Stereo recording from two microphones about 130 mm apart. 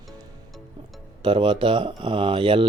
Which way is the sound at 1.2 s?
40° right (ahead or behind).